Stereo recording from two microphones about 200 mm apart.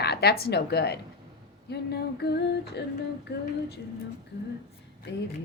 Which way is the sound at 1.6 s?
55° left (ahead or behind).